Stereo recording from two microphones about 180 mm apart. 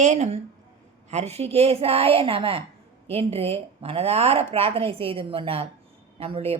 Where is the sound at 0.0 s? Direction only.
40° right (ahead or behind).